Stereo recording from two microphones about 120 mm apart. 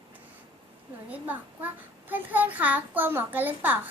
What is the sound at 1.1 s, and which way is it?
A child's voice, 15° right (ahead or behind).